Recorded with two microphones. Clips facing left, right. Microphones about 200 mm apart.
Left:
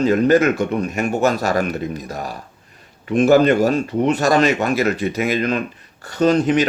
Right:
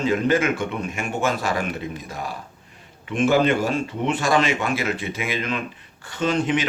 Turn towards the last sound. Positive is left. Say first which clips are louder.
# left 7 dB
turn(degrees=40)  # may be behind; listen again after turning